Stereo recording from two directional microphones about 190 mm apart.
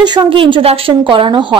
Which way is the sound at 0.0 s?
20° right (ahead or behind).